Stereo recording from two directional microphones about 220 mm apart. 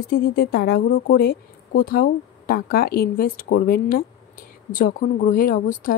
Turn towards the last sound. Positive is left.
turn(degrees=40)  # may be behind; listen again after turning